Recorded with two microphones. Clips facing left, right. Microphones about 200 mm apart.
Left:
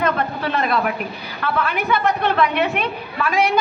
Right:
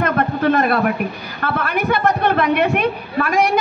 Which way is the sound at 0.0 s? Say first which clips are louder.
Right 4 dB; 50° right (ahead or behind).